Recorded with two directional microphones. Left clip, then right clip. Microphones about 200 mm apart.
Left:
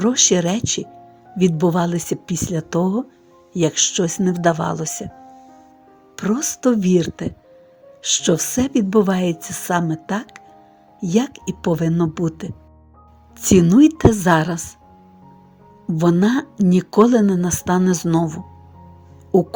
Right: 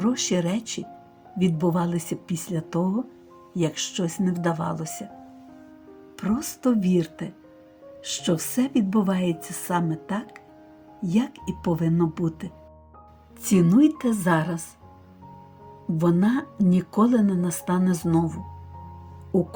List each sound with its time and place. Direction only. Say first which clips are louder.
0.0 s speech: left 9 dB; 45° left (ahead or behind)
6.1 s speech: left 7 dB; 45° left (ahead or behind)
16.0 s speech: left 6 dB; 45° left (ahead or behind)